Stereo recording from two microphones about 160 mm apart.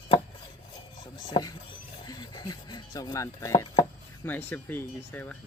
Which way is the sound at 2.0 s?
25° left (ahead or behind).